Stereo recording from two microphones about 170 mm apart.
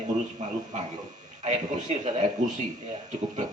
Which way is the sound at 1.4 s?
40° right (ahead or behind).